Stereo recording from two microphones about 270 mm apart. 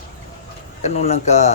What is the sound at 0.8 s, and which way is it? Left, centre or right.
Speech, left.